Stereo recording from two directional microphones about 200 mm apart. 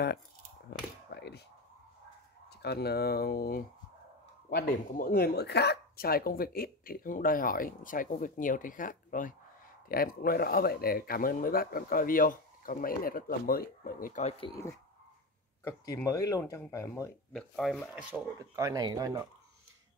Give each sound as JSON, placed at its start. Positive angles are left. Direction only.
{"t": 0.7, "sound": "a sound", "side_deg": 55}
{"t": 2.6, "sound": "speech", "side_deg": 55}
{"t": 14.4, "sound": "speech", "side_deg": 15}
{"t": 17.3, "sound": "speech", "side_deg": 0}
{"t": 18.4, "sound": "speech", "side_deg": -15}